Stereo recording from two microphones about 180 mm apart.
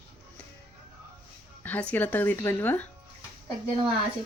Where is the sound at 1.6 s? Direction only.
10° left (ahead or behind).